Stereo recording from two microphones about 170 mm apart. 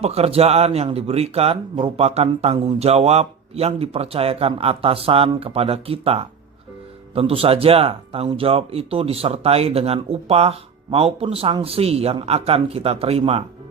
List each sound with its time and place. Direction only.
0.0 s speech: 35° right (ahead or behind)